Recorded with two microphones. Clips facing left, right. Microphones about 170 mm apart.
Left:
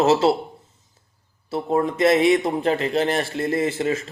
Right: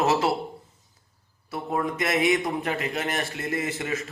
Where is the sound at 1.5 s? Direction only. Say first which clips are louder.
Left 6 dB; 30° left (ahead or behind).